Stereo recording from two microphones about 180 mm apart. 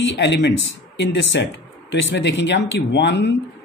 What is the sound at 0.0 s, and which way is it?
Speech, 80° left.